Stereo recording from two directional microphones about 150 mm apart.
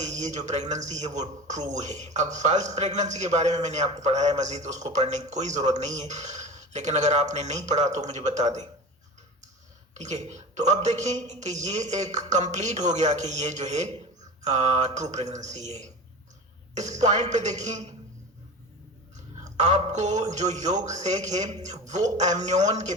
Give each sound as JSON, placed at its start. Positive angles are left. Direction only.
{"t": 0.0, "sound": "a man's voice", "side_deg": -50}
{"t": 9.9, "sound": "a man's voice", "side_deg": -50}
{"t": 19.5, "sound": "a man's voice", "side_deg": -50}